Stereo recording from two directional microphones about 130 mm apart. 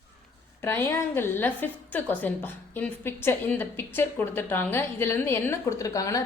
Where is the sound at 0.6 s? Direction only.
20° left (ahead or behind).